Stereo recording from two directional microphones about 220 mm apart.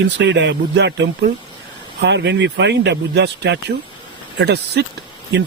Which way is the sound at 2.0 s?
50° right (ahead or behind).